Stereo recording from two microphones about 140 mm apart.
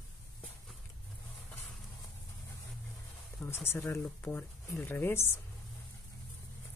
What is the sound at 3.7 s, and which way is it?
Speech, 20° left (ahead or behind).